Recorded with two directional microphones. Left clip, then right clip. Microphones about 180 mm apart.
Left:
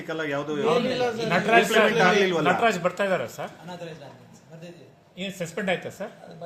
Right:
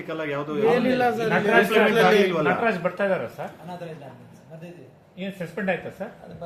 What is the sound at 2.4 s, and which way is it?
Speech, 75° left (ahead or behind).